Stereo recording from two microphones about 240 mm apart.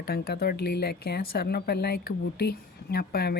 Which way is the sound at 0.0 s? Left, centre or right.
Left.